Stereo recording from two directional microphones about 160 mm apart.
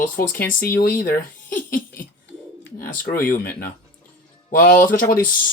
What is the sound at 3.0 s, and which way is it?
Speech, 65° left (ahead or behind).